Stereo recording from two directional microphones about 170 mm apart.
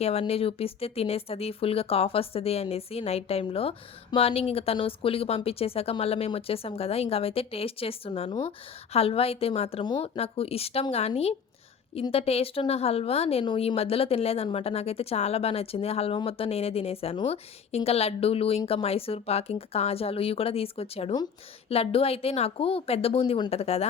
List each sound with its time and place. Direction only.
0.0 s a woman's voice: 35° left (ahead or behind)